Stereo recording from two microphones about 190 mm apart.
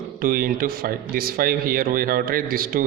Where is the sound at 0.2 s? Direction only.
50° right (ahead or behind).